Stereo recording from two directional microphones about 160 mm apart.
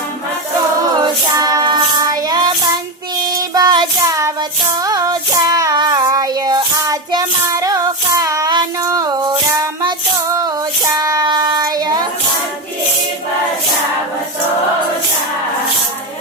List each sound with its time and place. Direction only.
1.0 s music: 20° right (ahead or behind)
3.3 s child singing: 25° right (ahead or behind)